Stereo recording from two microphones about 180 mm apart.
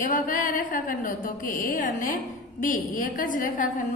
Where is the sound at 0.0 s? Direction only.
50° left (ahead or behind).